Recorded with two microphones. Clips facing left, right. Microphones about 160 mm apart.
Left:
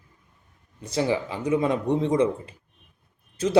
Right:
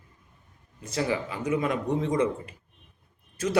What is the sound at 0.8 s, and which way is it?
Speech, 30° left (ahead or behind).